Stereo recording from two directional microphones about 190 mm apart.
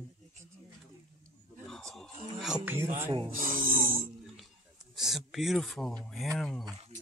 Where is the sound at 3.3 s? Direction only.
45° right (ahead or behind).